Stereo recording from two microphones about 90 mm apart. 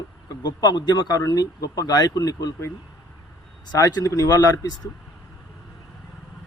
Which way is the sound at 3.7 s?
45° left (ahead or behind).